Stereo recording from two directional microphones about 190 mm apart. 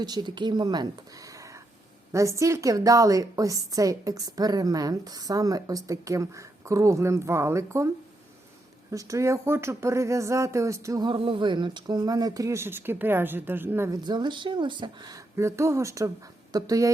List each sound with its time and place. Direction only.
0.0 s speech: 20° right (ahead or behind)
8.9 s speech: 15° right (ahead or behind)